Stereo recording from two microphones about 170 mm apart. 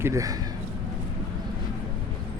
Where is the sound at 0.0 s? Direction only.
20° right (ahead or behind).